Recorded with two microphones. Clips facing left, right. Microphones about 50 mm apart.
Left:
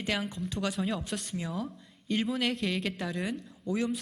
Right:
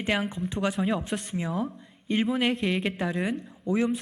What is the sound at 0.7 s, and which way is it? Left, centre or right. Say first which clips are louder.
Speech: right 5 dB; centre.